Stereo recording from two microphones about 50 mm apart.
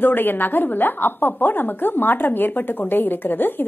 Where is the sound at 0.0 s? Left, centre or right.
Left.